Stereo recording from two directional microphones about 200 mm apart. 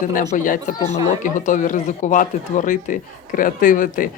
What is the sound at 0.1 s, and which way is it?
Speech, 40° left (ahead or behind).